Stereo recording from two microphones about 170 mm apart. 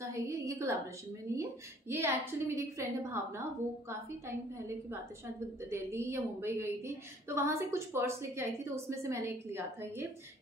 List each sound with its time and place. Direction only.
0.0 s a sound: 15° right (ahead or behind)
1.3 s a woman's voice: 15° right (ahead or behind)
5.7 s a woman's voice: 15° right (ahead or behind)